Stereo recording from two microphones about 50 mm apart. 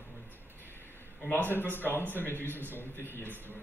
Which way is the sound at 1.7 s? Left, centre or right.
Left.